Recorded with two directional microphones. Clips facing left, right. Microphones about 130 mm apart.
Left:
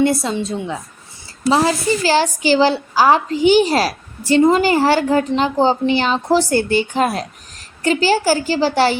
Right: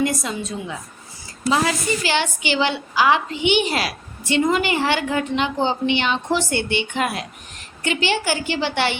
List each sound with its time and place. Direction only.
0.0 s a woman's voice: 30° left (ahead or behind)